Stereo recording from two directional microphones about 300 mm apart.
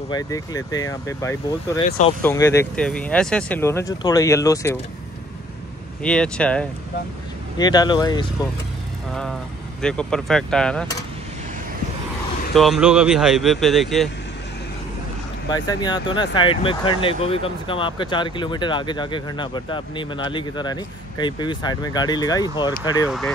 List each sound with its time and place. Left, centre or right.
0.1 s speech: centre
1.9 s speech: left
2.2 s speech: centre
6.0 s speech: centre
9.8 s speech: centre
12.5 s speech: centre
15.5 s speech: centre
23.0 s speech: centre